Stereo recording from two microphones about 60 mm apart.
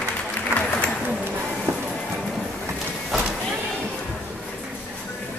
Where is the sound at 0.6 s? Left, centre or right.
Left.